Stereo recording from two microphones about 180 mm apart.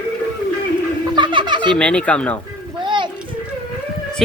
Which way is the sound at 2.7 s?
25° right (ahead or behind).